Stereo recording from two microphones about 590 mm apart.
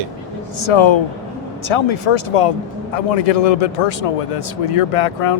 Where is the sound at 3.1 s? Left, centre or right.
Left.